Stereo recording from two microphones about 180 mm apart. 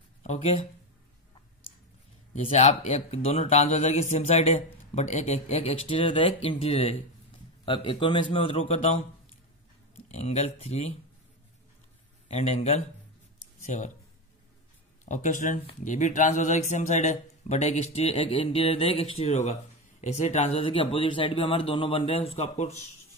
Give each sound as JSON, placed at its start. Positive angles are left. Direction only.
{"t": 0.2, "sound": "speech", "side_deg": 35}
{"t": 2.4, "sound": "a man's voice", "side_deg": 35}
{"t": 10.0, "sound": "speech", "side_deg": 40}
{"t": 12.3, "sound": "speech", "side_deg": 35}
{"t": 15.0, "sound": "speech", "side_deg": 45}